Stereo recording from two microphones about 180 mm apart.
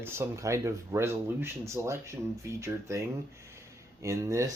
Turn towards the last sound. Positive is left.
turn(degrees=-15)  # may be behind; listen again after turning